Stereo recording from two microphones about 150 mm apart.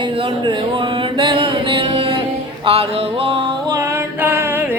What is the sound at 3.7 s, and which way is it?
Music, 20° right (ahead or behind).